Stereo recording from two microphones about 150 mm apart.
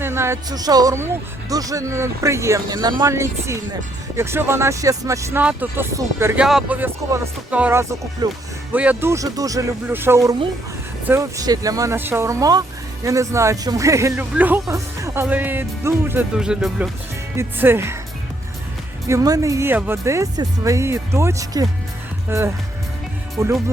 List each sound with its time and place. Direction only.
0.0 s speech: 15° right (ahead or behind)
6.4 s speech: 5° right (ahead or behind)
16.4 s speech: 5° right (ahead or behind)
17.3 s speech: 15° right (ahead or behind)
19.0 s speech: 20° right (ahead or behind)